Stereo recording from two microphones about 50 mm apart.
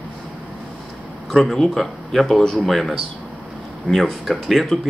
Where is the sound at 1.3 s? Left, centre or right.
Centre.